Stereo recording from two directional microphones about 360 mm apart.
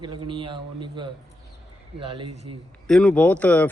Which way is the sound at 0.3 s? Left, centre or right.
Centre.